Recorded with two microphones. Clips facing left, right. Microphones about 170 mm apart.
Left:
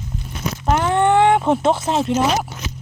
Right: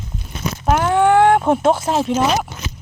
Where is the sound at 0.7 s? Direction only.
5° right (ahead or behind).